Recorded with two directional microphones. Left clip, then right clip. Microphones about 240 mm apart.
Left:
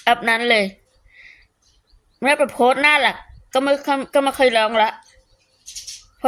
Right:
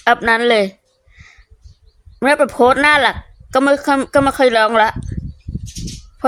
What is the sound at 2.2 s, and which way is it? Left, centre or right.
A woman's voice, right.